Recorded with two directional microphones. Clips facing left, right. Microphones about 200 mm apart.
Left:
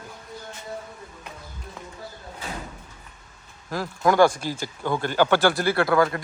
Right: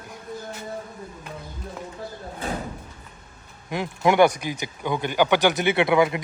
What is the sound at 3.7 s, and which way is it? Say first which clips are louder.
Speech: right 1 dB; 20° right (ahead or behind).